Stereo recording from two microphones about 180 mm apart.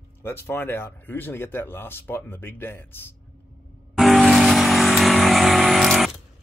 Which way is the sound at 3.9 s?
Centre (ahead or behind).